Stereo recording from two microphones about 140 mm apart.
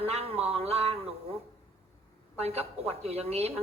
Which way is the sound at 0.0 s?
45° right (ahead or behind).